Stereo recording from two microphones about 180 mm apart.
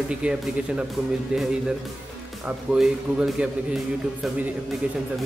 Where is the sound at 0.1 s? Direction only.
5° right (ahead or behind).